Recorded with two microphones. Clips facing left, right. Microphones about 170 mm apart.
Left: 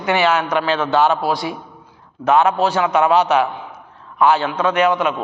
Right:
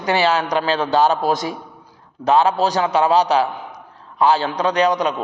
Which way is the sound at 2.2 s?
35° right (ahead or behind).